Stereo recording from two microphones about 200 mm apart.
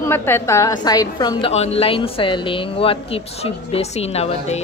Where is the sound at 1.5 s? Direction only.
30° left (ahead or behind).